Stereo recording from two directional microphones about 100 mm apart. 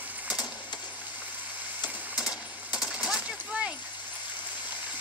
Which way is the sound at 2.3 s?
5° right (ahead or behind).